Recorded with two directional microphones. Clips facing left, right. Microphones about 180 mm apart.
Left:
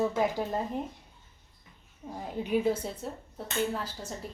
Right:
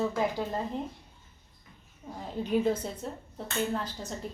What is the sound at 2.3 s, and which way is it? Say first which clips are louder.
A woman's voice: even; 10° left (ahead or behind).